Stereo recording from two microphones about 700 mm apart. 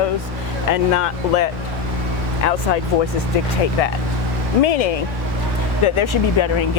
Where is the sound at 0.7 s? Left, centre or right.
Left.